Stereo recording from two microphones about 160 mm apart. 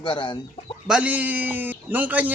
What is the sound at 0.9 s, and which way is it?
Speech, 10° right (ahead or behind).